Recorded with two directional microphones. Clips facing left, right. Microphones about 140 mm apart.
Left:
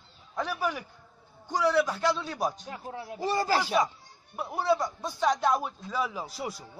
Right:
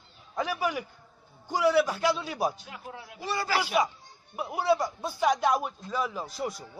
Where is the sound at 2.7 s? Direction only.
35° left (ahead or behind).